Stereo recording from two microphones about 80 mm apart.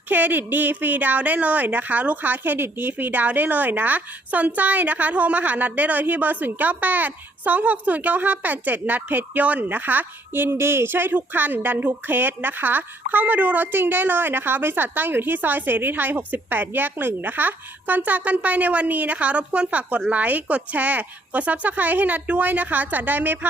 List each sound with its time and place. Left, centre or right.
0.1 s a woman's voice: right